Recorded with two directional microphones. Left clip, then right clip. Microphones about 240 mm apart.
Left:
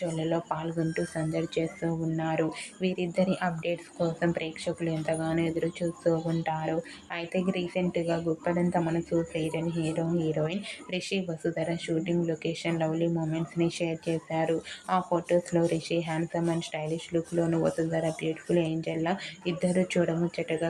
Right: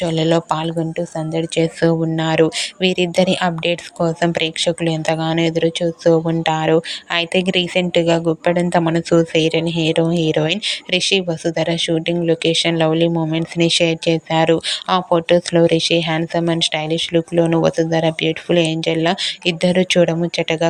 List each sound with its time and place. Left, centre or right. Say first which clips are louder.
0.0 s speech: right 13 dB; right